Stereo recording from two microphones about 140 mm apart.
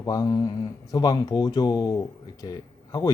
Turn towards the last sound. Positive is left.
turn(degrees=25)  # may be behind; listen again after turning